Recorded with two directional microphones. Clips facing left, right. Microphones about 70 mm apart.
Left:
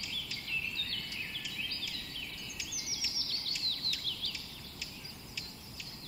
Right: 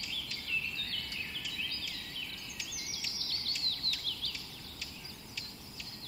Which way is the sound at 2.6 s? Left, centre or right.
Right.